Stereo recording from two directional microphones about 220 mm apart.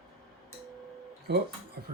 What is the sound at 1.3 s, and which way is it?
Speech, 50° right (ahead or behind).